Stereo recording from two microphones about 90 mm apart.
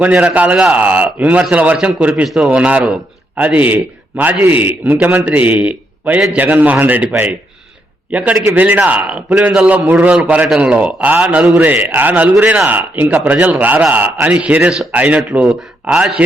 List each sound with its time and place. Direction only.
0.1 s a man's voice: 15° right (ahead or behind)
8.1 s a man's voice: 15° right (ahead or behind)